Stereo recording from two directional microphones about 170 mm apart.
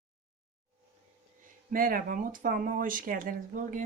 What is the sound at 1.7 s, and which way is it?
Speech, 55° right (ahead or behind).